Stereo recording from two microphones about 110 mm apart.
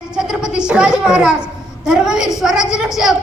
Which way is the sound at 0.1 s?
5° right (ahead or behind).